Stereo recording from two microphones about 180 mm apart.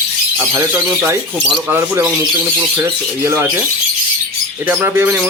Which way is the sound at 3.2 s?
15° right (ahead or behind).